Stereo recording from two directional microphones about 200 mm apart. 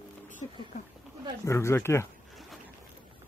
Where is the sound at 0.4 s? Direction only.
25° left (ahead or behind).